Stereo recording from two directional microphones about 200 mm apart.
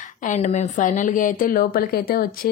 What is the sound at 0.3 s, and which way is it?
A woman's voice, 35° left (ahead or behind).